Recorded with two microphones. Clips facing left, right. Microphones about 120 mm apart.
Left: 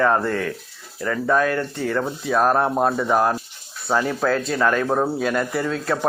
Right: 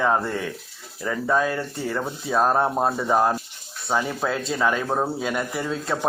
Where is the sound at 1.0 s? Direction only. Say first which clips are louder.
Left 3 dB; 15° right (ahead or behind).